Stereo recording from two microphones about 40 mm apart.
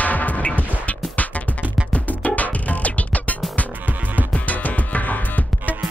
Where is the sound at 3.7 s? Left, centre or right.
Right.